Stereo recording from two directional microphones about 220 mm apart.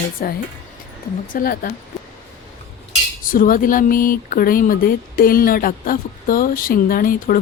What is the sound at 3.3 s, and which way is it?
Speech, 40° left (ahead or behind).